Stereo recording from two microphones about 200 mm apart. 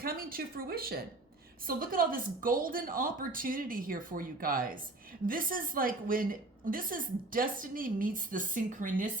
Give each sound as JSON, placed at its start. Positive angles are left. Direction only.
{"t": 0.0, "sound": "a woman's voice", "side_deg": -45}